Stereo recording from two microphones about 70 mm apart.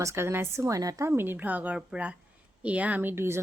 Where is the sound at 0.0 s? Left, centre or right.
Right.